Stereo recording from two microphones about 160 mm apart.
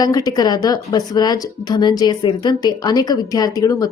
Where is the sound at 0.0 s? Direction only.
25° left (ahead or behind).